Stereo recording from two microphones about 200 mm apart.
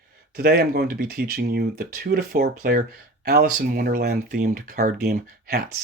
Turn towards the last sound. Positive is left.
turn(degrees=-50)  # may be behind; listen again after turning